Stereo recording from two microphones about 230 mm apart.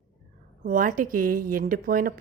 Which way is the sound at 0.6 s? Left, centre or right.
Right.